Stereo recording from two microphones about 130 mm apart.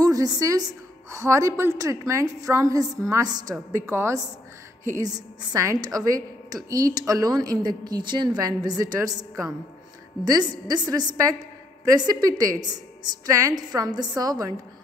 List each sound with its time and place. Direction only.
0.0 s a woman's voice: 30° right (ahead or behind)